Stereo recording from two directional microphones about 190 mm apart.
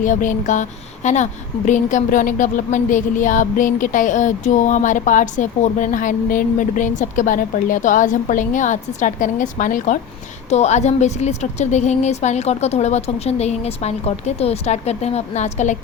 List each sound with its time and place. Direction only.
0.0 s a woman's voice: 40° left (ahead or behind)